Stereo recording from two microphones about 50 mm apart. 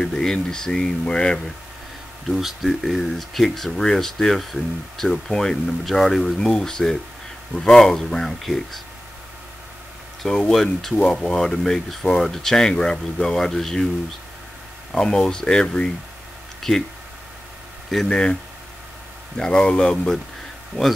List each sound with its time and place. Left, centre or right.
0.0 s speech: centre
2.2 s speech: centre
10.2 s speech: centre
14.9 s speech: centre
18.0 s speech: centre